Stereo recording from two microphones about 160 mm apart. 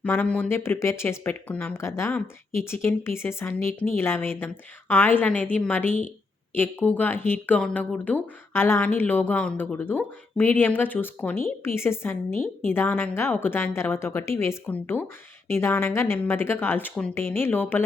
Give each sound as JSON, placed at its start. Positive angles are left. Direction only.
{"t": 0.0, "sound": "speech", "side_deg": 10}